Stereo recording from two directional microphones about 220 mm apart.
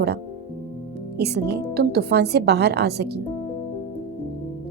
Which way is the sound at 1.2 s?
50° right (ahead or behind).